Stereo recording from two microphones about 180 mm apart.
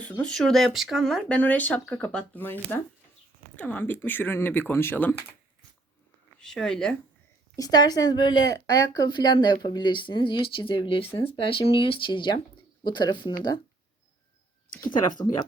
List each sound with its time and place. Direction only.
0.0 s speech: 5° left (ahead or behind)
6.4 s speech: 5° left (ahead or behind)
7.5 s speech: 20° left (ahead or behind)